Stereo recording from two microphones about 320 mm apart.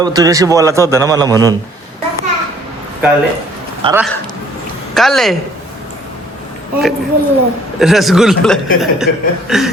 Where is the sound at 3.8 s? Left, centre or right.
Centre.